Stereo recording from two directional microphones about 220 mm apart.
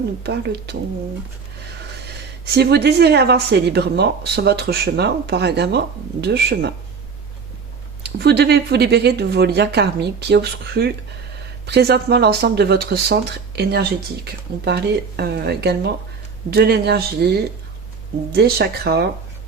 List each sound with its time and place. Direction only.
0.2 s speech: 50° right (ahead or behind)
2.5 s speech: 45° right (ahead or behind)
8.2 s speech: 45° right (ahead or behind)